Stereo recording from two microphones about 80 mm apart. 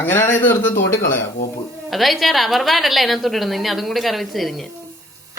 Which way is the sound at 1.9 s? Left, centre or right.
Centre.